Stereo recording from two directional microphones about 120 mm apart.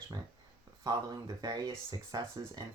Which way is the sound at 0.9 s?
35° right (ahead or behind).